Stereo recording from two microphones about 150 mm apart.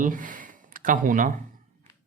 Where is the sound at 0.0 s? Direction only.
60° right (ahead or behind).